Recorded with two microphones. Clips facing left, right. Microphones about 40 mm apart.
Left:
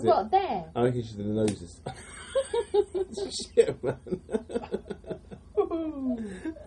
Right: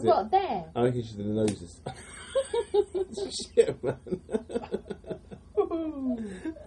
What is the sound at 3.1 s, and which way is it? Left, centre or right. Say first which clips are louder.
Speech: even; right.